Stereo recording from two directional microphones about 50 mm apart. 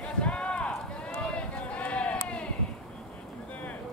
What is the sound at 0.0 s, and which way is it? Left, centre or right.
Run, left.